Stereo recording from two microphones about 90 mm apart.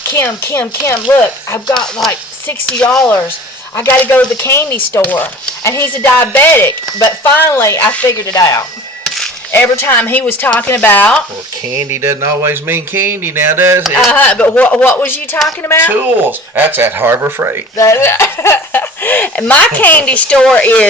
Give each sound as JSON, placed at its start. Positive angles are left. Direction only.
{"t": 0.1, "sound": "speech", "side_deg": 25}
{"t": 2.6, "sound": "speech", "side_deg": 10}
{"t": 4.4, "sound": "speech", "side_deg": 30}
{"t": 5.6, "sound": "speech", "side_deg": 30}
{"t": 8.3, "sound": "speech", "side_deg": 40}
{"t": 9.0, "sound": "a sound", "side_deg": 5}
{"t": 9.5, "sound": "speech", "side_deg": 25}
{"t": 11.8, "sound": "speech", "side_deg": -30}
{"t": 14.1, "sound": "speech", "side_deg": 15}
{"t": 15.9, "sound": "speech", "side_deg": -20}
{"t": 17.7, "sound": "speech", "side_deg": 30}